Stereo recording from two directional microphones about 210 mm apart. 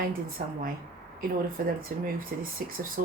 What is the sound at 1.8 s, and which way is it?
Speech, 40° right (ahead or behind).